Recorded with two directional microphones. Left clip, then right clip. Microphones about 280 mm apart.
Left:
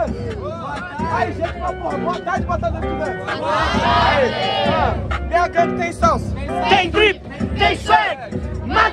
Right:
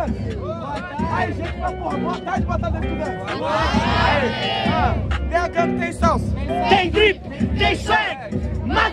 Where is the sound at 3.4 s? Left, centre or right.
Right.